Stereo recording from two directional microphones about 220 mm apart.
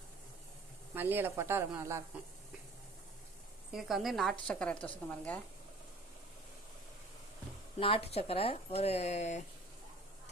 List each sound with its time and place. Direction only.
0.9 s speech: 10° right (ahead or behind)
3.7 s a woman's voice: centre (ahead or behind)
7.8 s speech: 25° left (ahead or behind)